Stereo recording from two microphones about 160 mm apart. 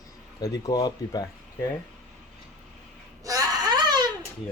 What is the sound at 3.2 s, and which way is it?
Baby cry, 20° right (ahead or behind).